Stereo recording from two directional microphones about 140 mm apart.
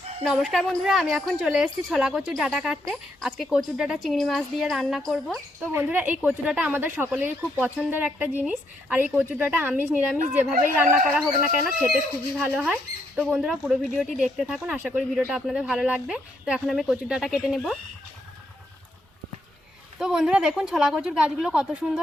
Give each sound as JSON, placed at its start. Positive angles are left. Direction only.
{"t": 0.2, "sound": "a woman's voice", "side_deg": 0}
{"t": 5.7, "sound": "speech", "side_deg": -15}
{"t": 10.5, "sound": "speech", "side_deg": -80}
{"t": 11.2, "sound": "a woman's voice", "side_deg": 0}
{"t": 20.0, "sound": "a woman's voice", "side_deg": -5}